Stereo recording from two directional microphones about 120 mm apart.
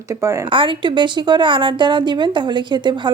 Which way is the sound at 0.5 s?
45° right (ahead or behind).